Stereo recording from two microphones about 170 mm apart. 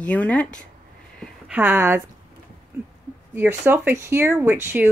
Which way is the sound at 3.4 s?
10° right (ahead or behind).